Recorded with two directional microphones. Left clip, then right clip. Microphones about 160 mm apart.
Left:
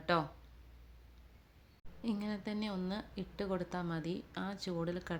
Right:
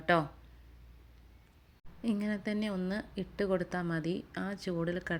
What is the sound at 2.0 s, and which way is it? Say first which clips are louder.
Speech: right 5 dB; 20° right (ahead or behind).